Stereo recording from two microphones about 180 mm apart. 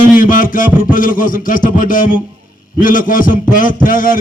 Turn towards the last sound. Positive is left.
turn(degrees=50)  # may be behind; listen again after turning